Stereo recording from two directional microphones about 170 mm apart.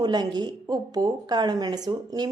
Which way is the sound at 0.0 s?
25° right (ahead or behind).